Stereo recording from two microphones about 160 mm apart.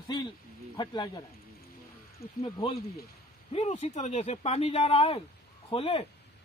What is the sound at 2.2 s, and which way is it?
Speech, 70° left (ahead or behind).